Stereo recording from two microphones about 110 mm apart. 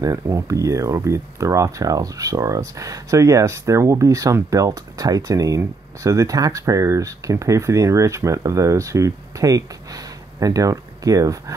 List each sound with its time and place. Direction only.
0.0 s speech: 30° right (ahead or behind)